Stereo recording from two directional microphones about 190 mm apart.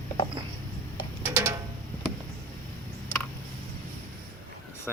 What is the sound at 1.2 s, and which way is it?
Music, 15° right (ahead or behind).